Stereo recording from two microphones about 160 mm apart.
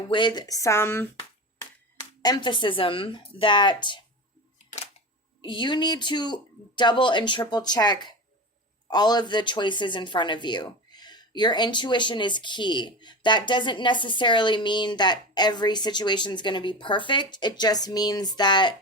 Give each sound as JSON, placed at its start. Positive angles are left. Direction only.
{"t": 0.1, "sound": "speech", "side_deg": 30}
{"t": 5.4, "sound": "speech", "side_deg": 30}